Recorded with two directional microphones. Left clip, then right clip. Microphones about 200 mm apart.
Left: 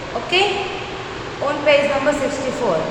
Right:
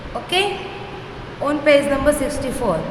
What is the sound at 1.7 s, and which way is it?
Speech, 55° right (ahead or behind).